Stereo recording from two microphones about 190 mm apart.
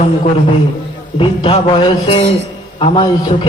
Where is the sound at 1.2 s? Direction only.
30° left (ahead or behind).